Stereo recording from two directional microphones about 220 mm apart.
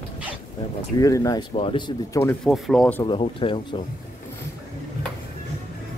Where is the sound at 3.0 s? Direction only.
25° left (ahead or behind).